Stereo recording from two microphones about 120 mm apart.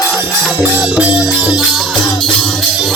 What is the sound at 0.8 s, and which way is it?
Music, 5° right (ahead or behind).